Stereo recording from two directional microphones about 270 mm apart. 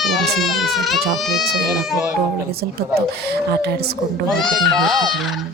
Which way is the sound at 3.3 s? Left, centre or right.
Right.